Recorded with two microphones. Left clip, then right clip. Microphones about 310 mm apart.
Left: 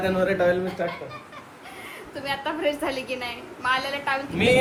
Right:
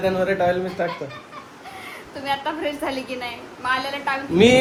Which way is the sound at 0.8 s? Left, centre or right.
Right.